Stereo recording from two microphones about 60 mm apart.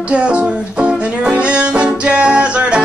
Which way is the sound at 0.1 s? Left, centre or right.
Centre.